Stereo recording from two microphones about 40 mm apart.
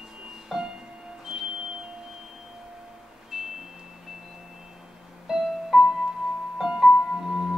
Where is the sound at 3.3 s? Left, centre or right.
Centre.